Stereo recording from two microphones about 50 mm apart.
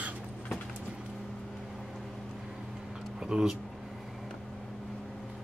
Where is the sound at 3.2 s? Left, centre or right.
Centre.